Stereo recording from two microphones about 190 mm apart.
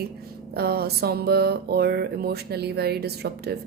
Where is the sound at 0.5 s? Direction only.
55° right (ahead or behind).